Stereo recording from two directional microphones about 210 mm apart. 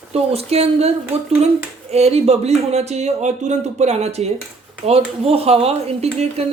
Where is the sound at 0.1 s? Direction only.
30° right (ahead or behind).